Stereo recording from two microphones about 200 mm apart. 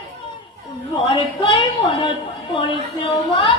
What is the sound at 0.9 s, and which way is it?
A woman's voice, 25° left (ahead or behind).